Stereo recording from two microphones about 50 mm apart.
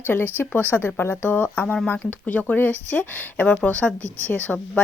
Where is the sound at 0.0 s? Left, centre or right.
Left.